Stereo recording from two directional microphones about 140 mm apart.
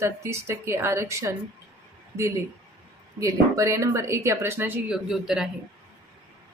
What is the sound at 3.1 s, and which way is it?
Speech, 20° right (ahead or behind).